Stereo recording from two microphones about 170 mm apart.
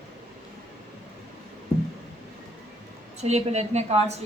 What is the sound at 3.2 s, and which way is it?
Speech, 40° right (ahead or behind).